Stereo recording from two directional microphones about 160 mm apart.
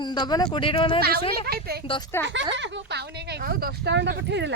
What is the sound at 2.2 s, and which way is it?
Speech, 15° left (ahead or behind).